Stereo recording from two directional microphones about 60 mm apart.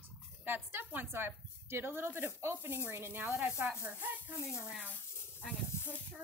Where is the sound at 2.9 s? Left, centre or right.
Right.